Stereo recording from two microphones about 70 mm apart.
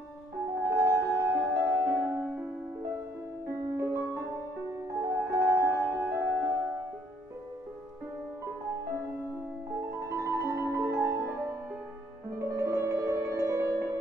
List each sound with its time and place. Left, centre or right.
0.6 s music: right
3.4 s music: right
9.8 s music: right
12.4 s music: right